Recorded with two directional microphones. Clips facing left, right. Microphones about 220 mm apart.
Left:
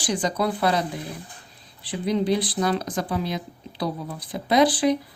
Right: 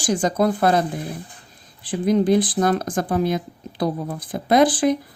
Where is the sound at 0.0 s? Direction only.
45° right (ahead or behind).